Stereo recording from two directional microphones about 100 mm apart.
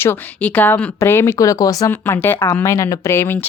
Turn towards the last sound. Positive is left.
turn(degrees=20)  # may be behind; listen again after turning